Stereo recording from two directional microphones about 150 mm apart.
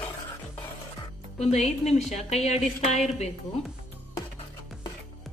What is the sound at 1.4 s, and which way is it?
Speech, 45° left (ahead or behind).